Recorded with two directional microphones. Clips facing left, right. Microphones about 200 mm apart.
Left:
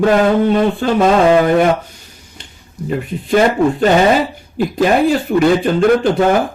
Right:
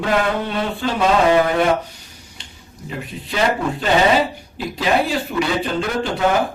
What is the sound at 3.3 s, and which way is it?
Speech, 50° left (ahead or behind).